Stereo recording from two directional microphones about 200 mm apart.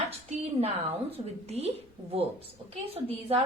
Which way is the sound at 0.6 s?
30° right (ahead or behind).